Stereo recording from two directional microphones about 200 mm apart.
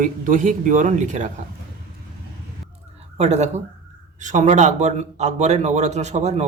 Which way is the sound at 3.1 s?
35° right (ahead or behind).